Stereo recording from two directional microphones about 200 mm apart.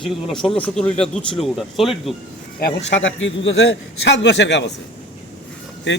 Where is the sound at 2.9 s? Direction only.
70° left (ahead or behind).